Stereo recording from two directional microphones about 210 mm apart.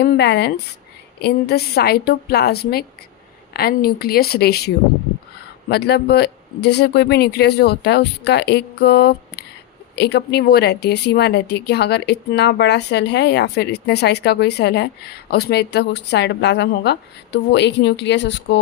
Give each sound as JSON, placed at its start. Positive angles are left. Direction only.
{"t": 0.0, "sound": "speech", "side_deg": 50}